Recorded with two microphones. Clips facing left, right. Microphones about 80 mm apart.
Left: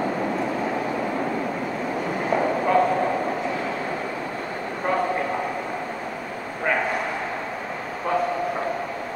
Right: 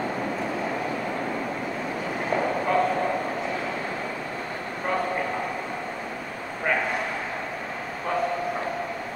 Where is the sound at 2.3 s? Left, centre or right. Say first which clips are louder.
Left 3 dB; centre.